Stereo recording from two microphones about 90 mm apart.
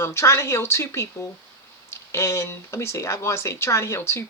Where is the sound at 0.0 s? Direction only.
30° left (ahead or behind).